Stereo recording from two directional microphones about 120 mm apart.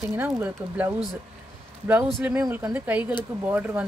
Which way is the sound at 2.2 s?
20° right (ahead or behind).